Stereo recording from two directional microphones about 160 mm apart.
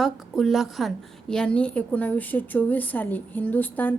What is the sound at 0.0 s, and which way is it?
A woman's voice, centre (ahead or behind).